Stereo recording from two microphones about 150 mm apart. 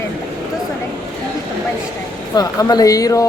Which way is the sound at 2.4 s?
25° left (ahead or behind).